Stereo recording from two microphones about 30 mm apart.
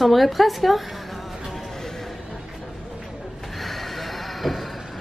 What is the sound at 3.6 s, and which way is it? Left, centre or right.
Neigh, centre.